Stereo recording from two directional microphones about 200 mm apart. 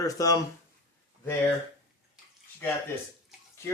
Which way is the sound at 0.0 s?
15° left (ahead or behind).